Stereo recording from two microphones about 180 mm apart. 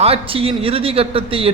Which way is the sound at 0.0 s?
30° right (ahead or behind).